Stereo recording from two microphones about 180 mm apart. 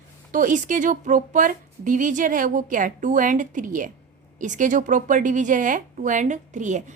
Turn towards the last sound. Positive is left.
turn(degrees=-40)  # may be behind; listen again after turning